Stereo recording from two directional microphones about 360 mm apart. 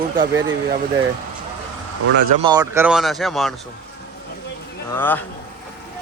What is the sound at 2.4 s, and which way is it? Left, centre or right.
Speech, centre.